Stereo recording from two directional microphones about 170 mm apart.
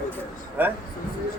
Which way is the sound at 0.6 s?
10° right (ahead or behind).